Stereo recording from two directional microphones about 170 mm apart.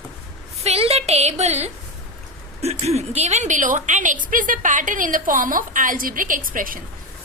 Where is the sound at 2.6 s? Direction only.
40° right (ahead or behind).